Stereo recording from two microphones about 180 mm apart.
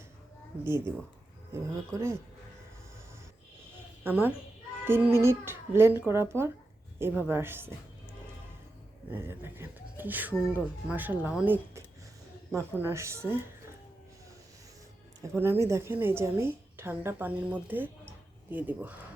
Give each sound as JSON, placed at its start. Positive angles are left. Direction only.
{"t": 0.6, "sound": "speech", "side_deg": -15}
{"t": 4.0, "sound": "speech", "side_deg": -10}
{"t": 9.0, "sound": "speech", "side_deg": -10}
{"t": 15.2, "sound": "speech", "side_deg": -15}